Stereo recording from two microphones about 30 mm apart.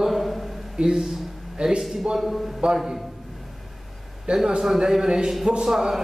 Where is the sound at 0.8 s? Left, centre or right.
Right.